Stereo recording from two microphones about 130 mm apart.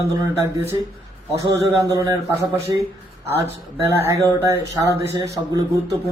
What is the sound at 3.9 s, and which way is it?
Speech, 25° right (ahead or behind).